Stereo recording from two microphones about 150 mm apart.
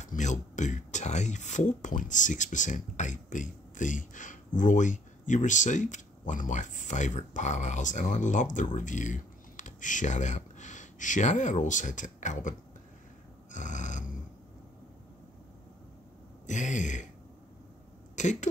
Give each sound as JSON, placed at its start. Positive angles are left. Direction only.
{"t": 0.0, "sound": "speech", "side_deg": 55}
{"t": 16.4, "sound": "speech", "side_deg": 55}
{"t": 18.1, "sound": "speech", "side_deg": 50}